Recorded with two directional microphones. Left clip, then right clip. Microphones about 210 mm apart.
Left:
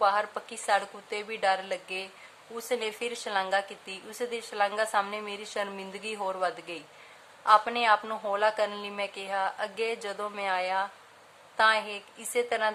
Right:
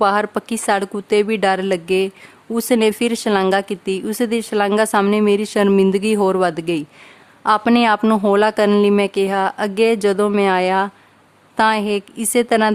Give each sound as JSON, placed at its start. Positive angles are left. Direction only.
{"t": 0.0, "sound": "speech", "side_deg": -50}